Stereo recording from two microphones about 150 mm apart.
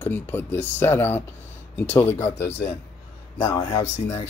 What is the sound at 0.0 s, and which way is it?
Speech, 15° left (ahead or behind).